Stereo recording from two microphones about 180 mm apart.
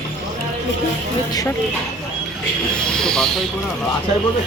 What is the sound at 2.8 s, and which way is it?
Speech, 5° left (ahead or behind).